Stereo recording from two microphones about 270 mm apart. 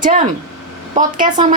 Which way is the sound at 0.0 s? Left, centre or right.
Right.